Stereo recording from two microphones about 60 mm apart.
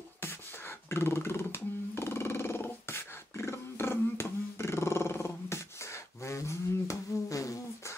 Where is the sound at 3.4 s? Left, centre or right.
Left.